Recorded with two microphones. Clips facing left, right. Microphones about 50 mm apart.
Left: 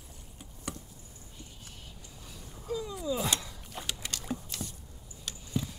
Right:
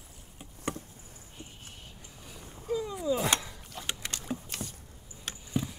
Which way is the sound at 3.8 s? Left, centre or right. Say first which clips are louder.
Right 2 dB; right.